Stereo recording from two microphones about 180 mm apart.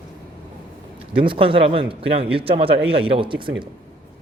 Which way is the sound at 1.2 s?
30° right (ahead or behind).